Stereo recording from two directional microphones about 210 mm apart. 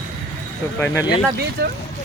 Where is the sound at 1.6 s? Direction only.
50° right (ahead or behind).